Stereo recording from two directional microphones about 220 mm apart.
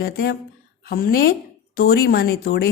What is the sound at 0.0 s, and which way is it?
A woman's voice, 45° left (ahead or behind).